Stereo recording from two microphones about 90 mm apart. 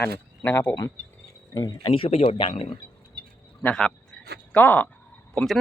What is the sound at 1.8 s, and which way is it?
Speech, 80° left.